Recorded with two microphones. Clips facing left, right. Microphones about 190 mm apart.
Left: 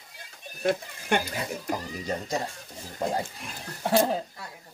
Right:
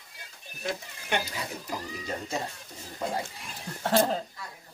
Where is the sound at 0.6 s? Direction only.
55° left (ahead or behind).